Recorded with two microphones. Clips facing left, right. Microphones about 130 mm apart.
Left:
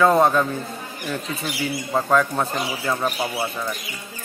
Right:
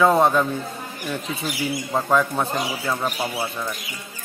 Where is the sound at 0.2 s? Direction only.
Centre (ahead or behind).